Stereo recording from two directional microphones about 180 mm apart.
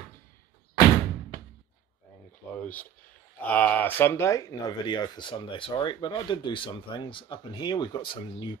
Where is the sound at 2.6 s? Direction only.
10° left (ahead or behind).